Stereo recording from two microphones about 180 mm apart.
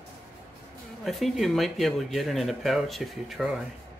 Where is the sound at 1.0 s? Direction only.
Centre (ahead or behind).